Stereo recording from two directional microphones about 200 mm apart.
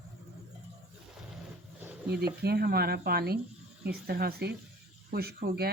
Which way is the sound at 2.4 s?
50° right (ahead or behind).